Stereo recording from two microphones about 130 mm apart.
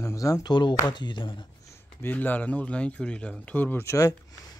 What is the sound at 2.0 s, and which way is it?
Speech, 15° left (ahead or behind).